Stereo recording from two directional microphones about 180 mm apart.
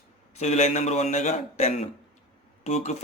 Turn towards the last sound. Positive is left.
turn(degrees=40)  # may be behind; listen again after turning